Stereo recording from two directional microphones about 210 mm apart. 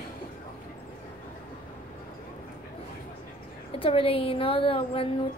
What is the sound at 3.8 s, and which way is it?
A woman's voice, 25° left (ahead or behind).